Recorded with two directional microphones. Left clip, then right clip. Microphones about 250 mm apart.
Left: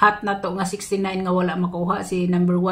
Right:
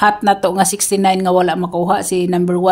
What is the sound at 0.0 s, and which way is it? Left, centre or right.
Speech, right.